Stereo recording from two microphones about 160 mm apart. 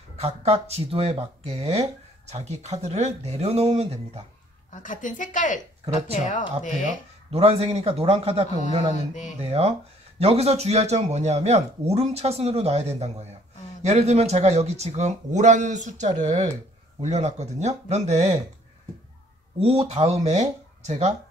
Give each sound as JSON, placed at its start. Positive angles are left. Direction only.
{"t": 0.2, "sound": "speech", "side_deg": -40}
{"t": 4.7, "sound": "a woman's voice", "side_deg": 55}
{"t": 7.2, "sound": "speech", "side_deg": -40}
{"t": 19.6, "sound": "speech", "side_deg": -40}